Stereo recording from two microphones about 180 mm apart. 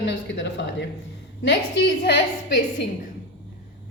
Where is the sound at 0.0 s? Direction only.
85° left.